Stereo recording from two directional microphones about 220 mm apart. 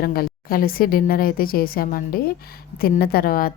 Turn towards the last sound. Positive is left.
turn(degrees=40)  # may be behind; listen again after turning